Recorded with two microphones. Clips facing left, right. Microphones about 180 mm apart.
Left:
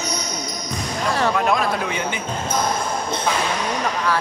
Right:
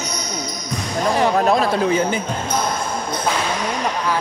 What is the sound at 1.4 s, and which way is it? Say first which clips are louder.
Speech: right 4 dB; 35° right (ahead or behind).